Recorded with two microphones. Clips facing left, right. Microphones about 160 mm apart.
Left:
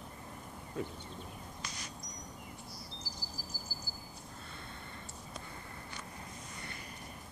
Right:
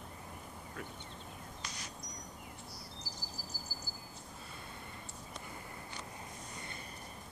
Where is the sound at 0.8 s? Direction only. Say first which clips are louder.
Left 8 dB; 25° left (ahead or behind).